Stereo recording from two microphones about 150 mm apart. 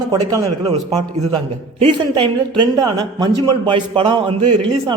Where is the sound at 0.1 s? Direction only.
25° right (ahead or behind).